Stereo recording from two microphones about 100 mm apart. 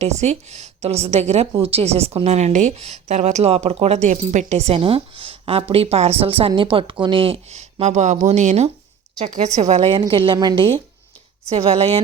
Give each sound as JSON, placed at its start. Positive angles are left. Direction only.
{"t": 0.0, "sound": "a woman's voice", "side_deg": -90}
{"t": 10.0, "sound": "speech", "side_deg": -50}
{"t": 11.4, "sound": "speech", "side_deg": -80}